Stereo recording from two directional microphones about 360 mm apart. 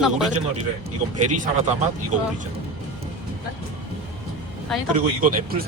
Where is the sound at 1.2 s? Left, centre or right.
Right.